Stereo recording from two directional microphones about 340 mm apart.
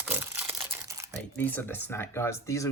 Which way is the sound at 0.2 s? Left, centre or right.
Centre.